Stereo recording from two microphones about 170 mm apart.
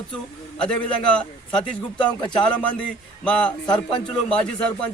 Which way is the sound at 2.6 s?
5° left (ahead or behind).